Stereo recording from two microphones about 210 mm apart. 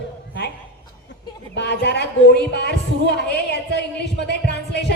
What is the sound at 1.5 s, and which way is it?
Speech, 55° left (ahead or behind).